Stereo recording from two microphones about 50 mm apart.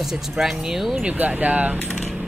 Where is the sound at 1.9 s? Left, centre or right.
Centre.